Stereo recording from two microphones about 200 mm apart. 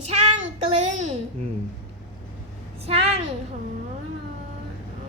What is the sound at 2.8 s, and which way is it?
Speech, 30° right (ahead or behind).